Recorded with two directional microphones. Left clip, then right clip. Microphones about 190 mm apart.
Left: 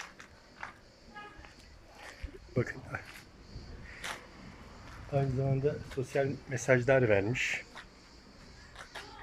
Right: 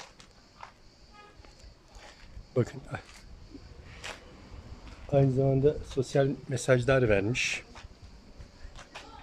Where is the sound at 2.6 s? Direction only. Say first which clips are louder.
Right 4 dB; 15° right (ahead or behind).